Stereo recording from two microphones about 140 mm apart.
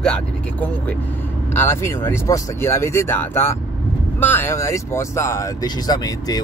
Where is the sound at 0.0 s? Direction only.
5° left (ahead or behind).